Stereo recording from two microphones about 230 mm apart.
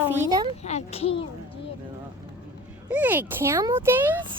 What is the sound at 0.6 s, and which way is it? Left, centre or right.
Speech, left.